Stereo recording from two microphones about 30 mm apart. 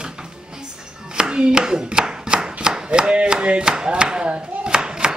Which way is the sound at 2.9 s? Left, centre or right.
Right.